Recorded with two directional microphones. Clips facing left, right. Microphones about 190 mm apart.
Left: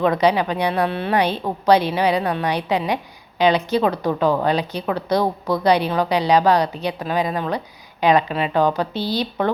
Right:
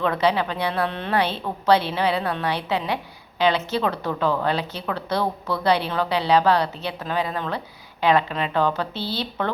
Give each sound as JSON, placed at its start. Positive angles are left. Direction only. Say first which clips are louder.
{"t": 0.0, "sound": "a woman's voice", "louder": "left 4 dB", "side_deg": 15}